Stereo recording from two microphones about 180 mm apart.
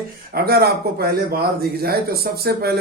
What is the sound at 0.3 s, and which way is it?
A man's voice, 60° right (ahead or behind).